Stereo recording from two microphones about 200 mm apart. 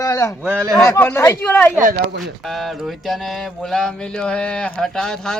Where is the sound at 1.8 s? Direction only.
40° right (ahead or behind).